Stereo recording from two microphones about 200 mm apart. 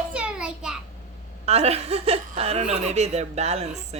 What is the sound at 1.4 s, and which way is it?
Speech, 30° right (ahead or behind).